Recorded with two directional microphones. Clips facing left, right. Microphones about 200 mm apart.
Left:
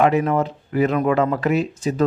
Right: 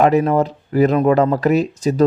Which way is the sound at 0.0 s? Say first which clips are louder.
Right 3 dB; 40° right (ahead or behind).